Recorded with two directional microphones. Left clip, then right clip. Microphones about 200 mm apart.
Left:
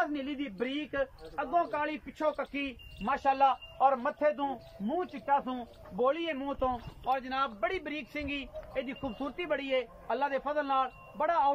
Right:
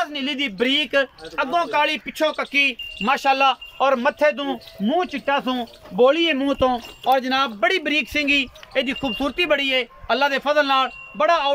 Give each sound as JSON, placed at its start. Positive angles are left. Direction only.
{"t": 0.1, "sound": "speech", "side_deg": -65}